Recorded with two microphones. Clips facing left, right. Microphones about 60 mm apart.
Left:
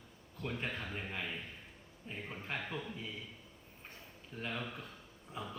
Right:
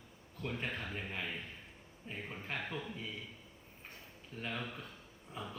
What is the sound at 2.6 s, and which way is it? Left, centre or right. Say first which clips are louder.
Speech: even; centre.